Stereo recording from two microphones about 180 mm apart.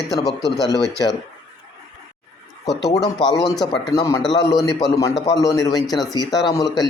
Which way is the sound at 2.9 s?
20° left (ahead or behind).